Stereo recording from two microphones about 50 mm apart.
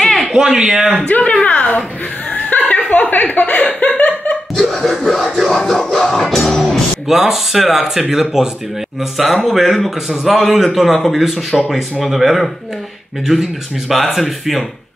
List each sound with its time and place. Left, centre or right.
0.0 s a sound: centre
0.4 s speech: centre
1.0 s a woman's voice: left
2.3 s chuckle: left
4.6 s music: centre
7.1 s a man's voice: centre